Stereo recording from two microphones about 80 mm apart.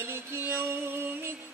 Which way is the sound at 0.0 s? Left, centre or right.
Right.